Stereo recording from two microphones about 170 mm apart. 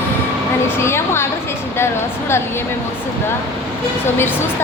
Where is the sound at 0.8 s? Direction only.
15° left (ahead or behind).